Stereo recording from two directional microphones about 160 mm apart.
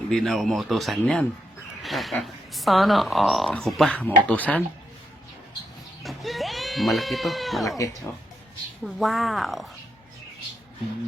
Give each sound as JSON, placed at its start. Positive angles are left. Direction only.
{"t": 0.1, "sound": "speech", "side_deg": 0}
{"t": 6.0, "sound": "goat", "side_deg": 0}
{"t": 7.8, "sound": "speech", "side_deg": 20}
{"t": 8.8, "sound": "speech", "side_deg": 0}